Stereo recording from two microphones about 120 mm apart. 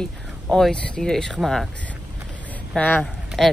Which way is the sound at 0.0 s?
5° left (ahead or behind).